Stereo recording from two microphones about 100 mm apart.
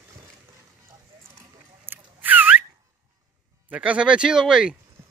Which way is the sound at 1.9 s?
15° right (ahead or behind).